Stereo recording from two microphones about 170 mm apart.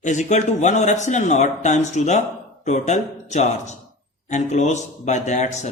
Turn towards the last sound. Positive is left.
turn(degrees=45)  # may be behind; listen again after turning